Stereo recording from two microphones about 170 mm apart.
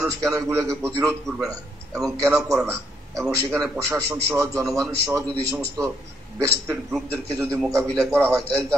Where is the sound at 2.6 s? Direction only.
15° right (ahead or behind).